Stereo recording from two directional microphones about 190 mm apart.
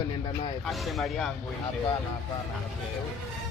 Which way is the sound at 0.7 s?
Centre (ahead or behind).